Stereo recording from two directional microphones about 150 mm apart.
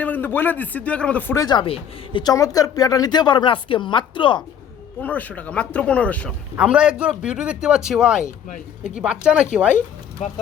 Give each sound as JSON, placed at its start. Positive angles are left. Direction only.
{"t": 0.0, "sound": "a man's voice", "side_deg": 10}
{"t": 1.4, "sound": "speech", "side_deg": 30}
{"t": 4.9, "sound": "speech", "side_deg": 10}
{"t": 6.6, "sound": "a man's voice", "side_deg": -5}
{"t": 10.2, "sound": "speech", "side_deg": 50}